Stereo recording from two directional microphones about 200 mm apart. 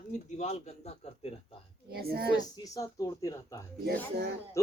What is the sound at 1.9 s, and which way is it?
Speech, 50° right (ahead or behind).